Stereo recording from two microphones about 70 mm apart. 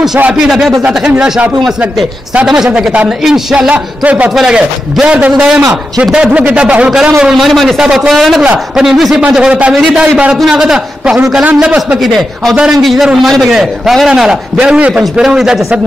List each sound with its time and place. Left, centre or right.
0.3 s a man's voice: centre
0.8 s a man's voice: centre
3.5 s a man's voice: centre
4.4 s a man's voice: centre
5.7 s a man's voice: centre
6.3 s a man's voice: centre
7.8 s a man's voice: centre
8.1 s a man's voice: centre
12.0 s a man's voice: centre
12.5 s a man's voice: centre